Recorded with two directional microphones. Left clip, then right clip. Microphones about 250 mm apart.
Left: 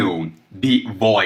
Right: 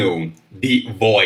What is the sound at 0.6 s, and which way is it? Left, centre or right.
Speech, centre.